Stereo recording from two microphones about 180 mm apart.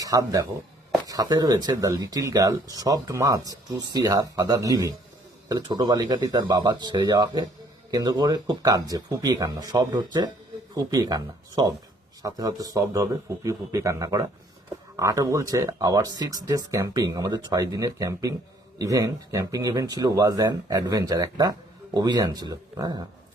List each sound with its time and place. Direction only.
0.0 s speech: 20° right (ahead or behind)